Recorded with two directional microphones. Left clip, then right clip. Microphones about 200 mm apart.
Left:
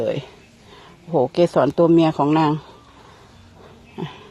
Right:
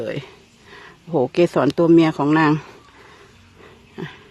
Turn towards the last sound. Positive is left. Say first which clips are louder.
# left 1 dB
turn(degrees=0)  # may be behind; listen again after turning